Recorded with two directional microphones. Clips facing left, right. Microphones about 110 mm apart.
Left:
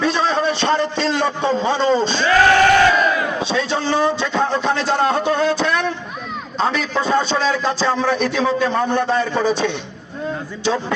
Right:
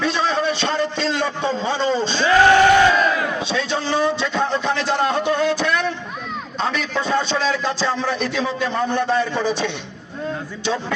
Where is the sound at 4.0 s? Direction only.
35° left (ahead or behind).